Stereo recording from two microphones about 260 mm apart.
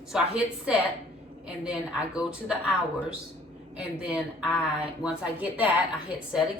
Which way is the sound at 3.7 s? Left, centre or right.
Centre.